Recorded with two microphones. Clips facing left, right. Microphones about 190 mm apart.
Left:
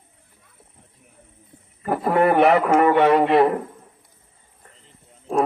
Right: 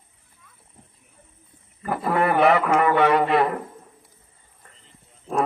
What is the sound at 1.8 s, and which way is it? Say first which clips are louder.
A man's voice: left 4 dB; 30° left (ahead or behind).